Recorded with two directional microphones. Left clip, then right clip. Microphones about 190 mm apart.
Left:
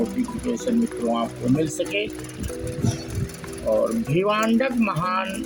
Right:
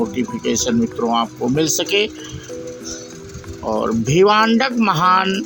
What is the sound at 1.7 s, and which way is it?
Speech, 45° right (ahead or behind).